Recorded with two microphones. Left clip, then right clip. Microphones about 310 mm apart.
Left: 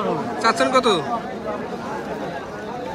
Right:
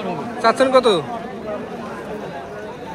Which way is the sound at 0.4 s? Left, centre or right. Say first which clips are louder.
Right 4 dB; centre.